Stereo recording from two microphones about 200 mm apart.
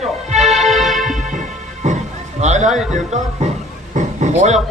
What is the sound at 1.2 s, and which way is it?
Music, 40° right (ahead or behind).